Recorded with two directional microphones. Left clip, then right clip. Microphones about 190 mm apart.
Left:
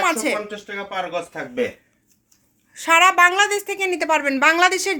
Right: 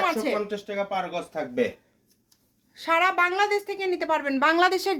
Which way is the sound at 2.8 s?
15° left (ahead or behind).